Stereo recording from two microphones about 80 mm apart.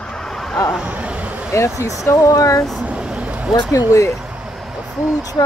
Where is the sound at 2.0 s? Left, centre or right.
Left.